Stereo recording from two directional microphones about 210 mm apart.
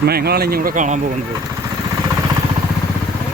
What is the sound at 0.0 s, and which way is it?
Speech, 50° right (ahead or behind).